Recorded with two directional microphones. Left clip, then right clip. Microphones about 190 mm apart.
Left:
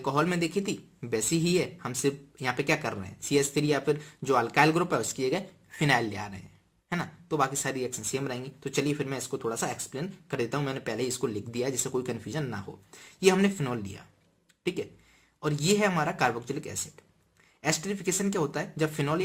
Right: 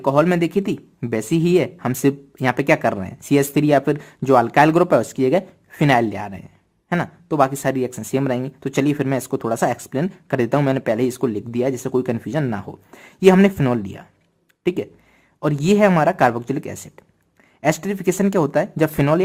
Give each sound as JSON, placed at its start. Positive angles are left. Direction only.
{"t": 0.0, "sound": "speech", "side_deg": -35}